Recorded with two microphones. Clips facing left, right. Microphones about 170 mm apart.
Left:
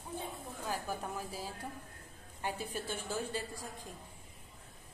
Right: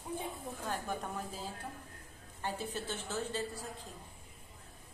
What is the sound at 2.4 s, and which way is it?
A woman's voice, 10° left (ahead or behind).